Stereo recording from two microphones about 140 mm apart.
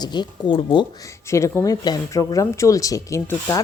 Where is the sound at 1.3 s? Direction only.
20° left (ahead or behind).